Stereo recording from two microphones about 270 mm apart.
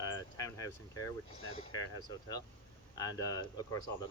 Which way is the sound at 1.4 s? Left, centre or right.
Left.